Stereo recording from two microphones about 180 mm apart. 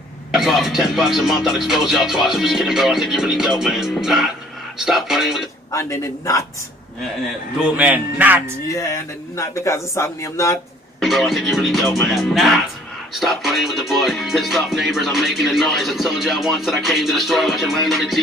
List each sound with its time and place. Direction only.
0.3 s music: centre (ahead or behind)
5.7 s speech: 15° left (ahead or behind)
7.7 s speech: 10° right (ahead or behind)
8.7 s speech: 15° left (ahead or behind)
11.0 s music: centre (ahead or behind)